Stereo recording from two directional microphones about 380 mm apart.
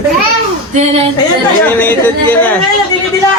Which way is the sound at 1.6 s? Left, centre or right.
Centre.